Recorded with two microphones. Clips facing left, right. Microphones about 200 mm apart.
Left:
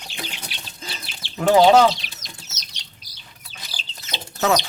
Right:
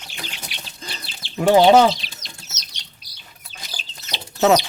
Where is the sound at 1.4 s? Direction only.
10° right (ahead or behind).